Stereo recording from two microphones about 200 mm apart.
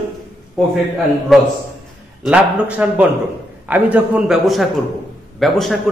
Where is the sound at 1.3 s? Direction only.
Centre (ahead or behind).